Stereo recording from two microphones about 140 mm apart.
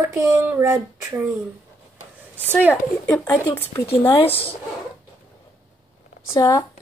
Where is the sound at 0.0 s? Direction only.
20° right (ahead or behind).